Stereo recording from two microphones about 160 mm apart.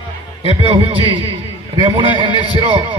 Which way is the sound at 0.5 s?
35° right (ahead or behind).